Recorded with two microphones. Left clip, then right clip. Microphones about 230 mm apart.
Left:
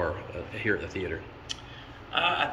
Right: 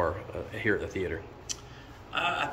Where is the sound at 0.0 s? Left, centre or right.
Centre.